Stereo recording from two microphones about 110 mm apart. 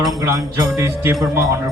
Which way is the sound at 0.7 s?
25° right (ahead or behind).